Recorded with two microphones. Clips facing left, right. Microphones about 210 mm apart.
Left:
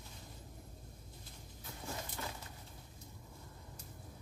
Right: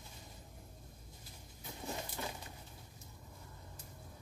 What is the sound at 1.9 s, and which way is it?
Pigeon, 20° right (ahead or behind).